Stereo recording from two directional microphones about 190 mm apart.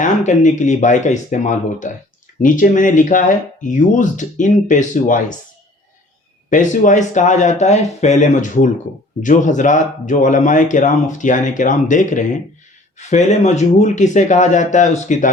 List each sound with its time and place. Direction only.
0.0 s speech: 40° left (ahead or behind)
6.5 s speech: 40° left (ahead or behind)